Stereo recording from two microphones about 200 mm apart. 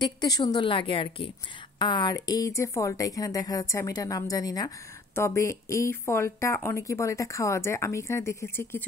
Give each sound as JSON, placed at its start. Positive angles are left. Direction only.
{"t": 0.0, "sound": "a woman's voice", "side_deg": 20}